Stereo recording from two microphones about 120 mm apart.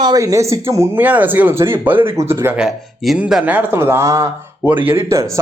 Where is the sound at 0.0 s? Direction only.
30° right (ahead or behind).